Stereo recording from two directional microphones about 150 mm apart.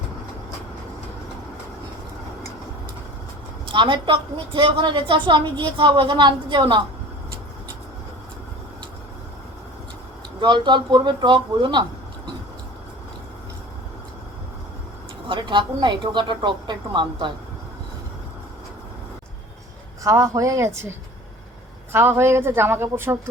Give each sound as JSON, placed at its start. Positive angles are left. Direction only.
{"t": 3.7, "sound": "a woman's voice", "side_deg": -35}
{"t": 10.4, "sound": "speech", "side_deg": -30}
{"t": 15.3, "sound": "a woman's voice", "side_deg": -30}
{"t": 20.1, "sound": "a woman's voice", "side_deg": -20}
{"t": 21.9, "sound": "a woman's voice", "side_deg": -15}